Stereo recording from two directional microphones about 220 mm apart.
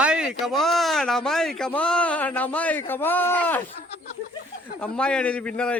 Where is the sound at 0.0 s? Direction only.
5° right (ahead or behind).